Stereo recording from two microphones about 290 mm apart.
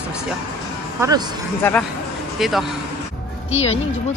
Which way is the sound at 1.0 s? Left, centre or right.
Centre.